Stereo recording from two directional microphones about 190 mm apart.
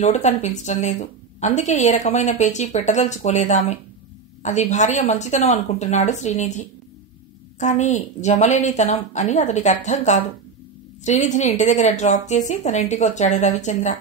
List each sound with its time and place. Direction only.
0.0 s a woman's voice: 35° left (ahead or behind)